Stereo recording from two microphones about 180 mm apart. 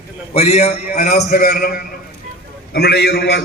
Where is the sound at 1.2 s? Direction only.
55° left (ahead or behind).